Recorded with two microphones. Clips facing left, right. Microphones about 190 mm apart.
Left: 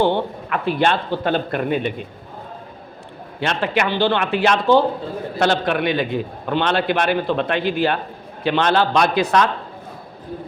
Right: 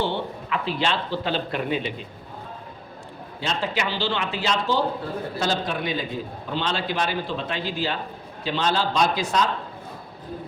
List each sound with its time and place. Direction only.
0.0 s a man's voice: 55° left (ahead or behind)
3.4 s a man's voice: 65° left (ahead or behind)